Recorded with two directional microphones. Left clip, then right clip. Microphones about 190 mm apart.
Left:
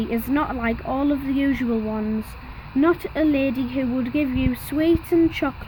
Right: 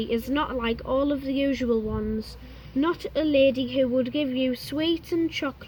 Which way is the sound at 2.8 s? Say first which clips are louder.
Left 6 dB; 50° left (ahead or behind).